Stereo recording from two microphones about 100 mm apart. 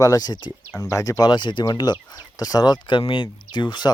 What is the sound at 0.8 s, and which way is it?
Speech, 30° left (ahead or behind).